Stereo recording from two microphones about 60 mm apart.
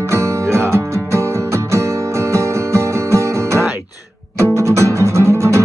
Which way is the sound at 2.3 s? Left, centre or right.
Right.